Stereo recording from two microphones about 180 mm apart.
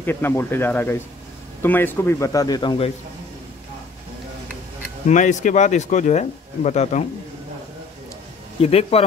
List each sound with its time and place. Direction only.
0.0 s a man's voice: 10° left (ahead or behind)
5.0 s speech: 45° left (ahead or behind)
8.5 s speech: 35° left (ahead or behind)